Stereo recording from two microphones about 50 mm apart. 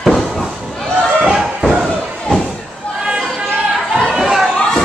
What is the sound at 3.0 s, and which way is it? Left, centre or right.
Chatter, centre.